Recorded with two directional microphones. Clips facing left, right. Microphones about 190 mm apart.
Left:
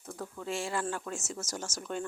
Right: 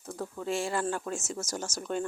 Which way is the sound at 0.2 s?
35° right (ahead or behind).